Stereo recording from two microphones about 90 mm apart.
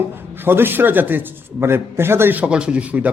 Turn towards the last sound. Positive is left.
turn(degrees=-15)  # may be behind; listen again after turning